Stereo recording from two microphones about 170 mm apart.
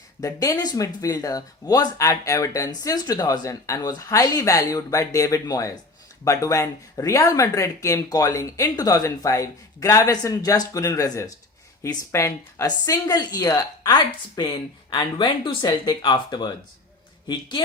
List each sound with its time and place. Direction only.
0.2 s speech: 20° left (ahead or behind)